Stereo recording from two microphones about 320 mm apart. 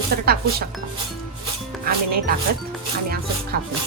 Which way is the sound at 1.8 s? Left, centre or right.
Right.